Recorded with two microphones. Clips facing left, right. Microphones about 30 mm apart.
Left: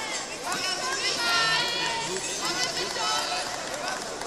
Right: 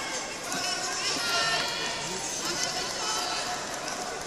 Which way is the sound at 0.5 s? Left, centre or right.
Left.